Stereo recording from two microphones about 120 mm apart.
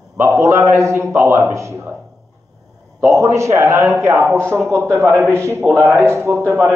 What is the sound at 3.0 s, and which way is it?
A man's voice, 25° right (ahead or behind).